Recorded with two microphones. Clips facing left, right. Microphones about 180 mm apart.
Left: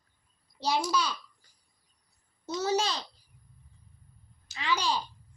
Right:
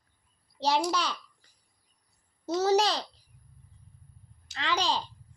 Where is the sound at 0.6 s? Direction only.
75° right (ahead or behind).